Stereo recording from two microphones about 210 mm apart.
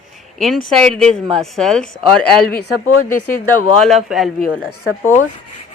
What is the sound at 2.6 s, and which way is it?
Speech, 90° left.